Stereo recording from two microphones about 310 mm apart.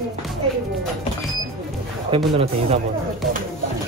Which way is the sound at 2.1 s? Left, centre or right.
Centre.